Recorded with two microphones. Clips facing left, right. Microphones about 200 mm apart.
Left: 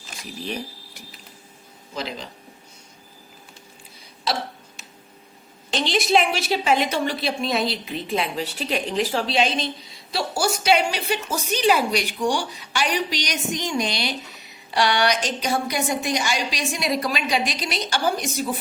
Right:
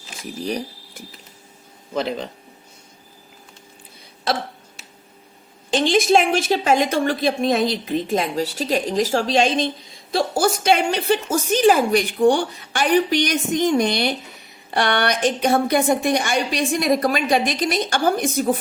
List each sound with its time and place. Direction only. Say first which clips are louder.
0.2 s speech: right 5 dB; 40° right (ahead or behind)
1.9 s speech: right 7 dB; 55° right (ahead or behind)
5.7 s a woman's voice: right 4 dB; 50° right (ahead or behind)